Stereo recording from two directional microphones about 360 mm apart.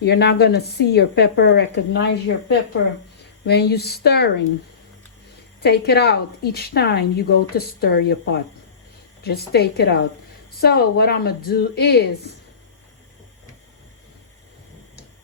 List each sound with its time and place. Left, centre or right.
0.0 s a woman's voice: left
5.6 s a woman's voice: left
9.5 s a woman's voice: left